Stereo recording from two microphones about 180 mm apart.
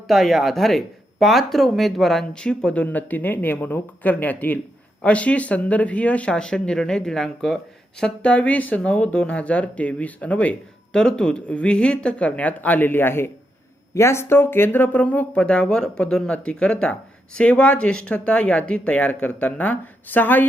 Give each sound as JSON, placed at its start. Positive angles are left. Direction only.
{"t": 0.1, "sound": "speech", "side_deg": 0}